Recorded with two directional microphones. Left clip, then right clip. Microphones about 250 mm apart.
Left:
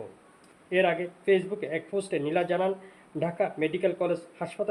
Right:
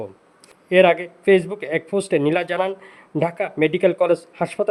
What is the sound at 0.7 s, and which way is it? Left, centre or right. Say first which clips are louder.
Speech: right 11 dB; right.